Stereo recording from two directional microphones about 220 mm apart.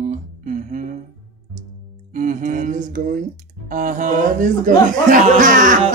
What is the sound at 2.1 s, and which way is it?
Speech, 35° right (ahead or behind).